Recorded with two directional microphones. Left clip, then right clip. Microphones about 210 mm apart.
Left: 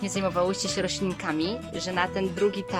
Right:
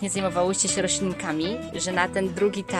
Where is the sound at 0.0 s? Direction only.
10° right (ahead or behind).